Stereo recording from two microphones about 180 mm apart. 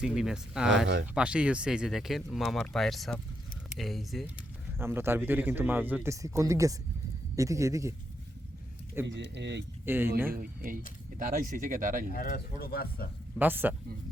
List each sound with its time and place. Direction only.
0.0 s speech: 5° right (ahead or behind)
4.8 s a man's voice: 15° right (ahead or behind)
9.0 s speech: 80° right
9.8 s speech: 10° right (ahead or behind)
10.3 s speech: 55° right (ahead or behind)
12.1 s speech: 55° left (ahead or behind)
13.4 s a man's voice: 10° right (ahead or behind)